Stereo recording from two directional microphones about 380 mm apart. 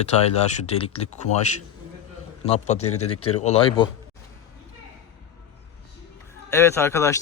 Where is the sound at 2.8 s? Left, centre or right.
Left.